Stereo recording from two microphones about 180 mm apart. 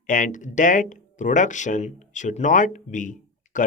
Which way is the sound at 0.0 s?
45° left (ahead or behind).